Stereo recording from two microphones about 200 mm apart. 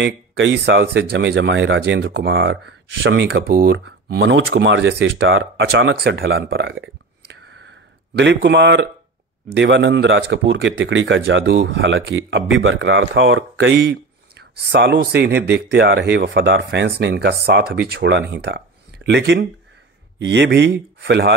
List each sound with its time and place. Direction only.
0.0 s speech: 65° right (ahead or behind)
3.6 s speech: 65° right (ahead or behind)
7.4 s a sound: 60° right (ahead or behind)
9.5 s speech: 60° right (ahead or behind)